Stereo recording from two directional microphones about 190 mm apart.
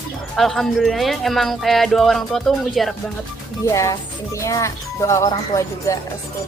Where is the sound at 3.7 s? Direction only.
15° left (ahead or behind).